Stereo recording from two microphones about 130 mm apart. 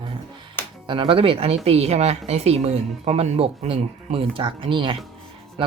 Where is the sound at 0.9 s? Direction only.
40° right (ahead or behind).